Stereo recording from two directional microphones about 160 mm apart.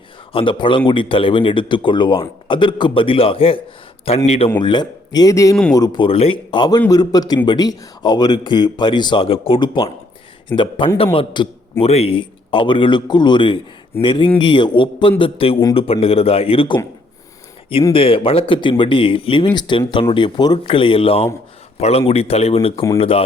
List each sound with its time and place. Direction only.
0.3 s a man's voice: 30° left (ahead or behind)
17.9 s a man's voice: 35° left (ahead or behind)